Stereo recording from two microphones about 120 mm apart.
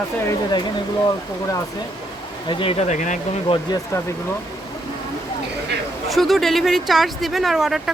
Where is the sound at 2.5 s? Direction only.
50° left (ahead or behind); by 3.2 s 90° left.